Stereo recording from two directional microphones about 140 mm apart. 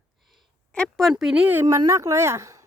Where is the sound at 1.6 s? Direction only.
25° right (ahead or behind).